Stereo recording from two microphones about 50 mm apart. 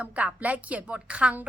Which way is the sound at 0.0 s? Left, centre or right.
Right.